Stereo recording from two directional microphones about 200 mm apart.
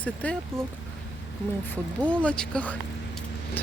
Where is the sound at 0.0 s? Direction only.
5° left (ahead or behind).